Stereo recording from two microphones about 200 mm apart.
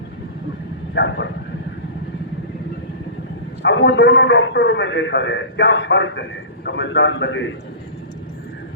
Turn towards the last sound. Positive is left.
turn(degrees=65)  # may be behind; listen again after turning